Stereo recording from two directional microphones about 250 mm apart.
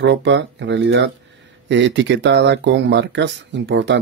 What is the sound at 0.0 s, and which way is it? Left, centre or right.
Speech, right.